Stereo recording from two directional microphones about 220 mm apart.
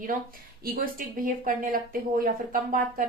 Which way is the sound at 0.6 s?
40° right (ahead or behind).